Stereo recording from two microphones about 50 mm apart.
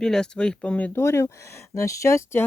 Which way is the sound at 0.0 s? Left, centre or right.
Centre.